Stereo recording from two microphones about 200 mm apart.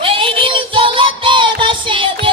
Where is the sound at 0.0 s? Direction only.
25° right (ahead or behind).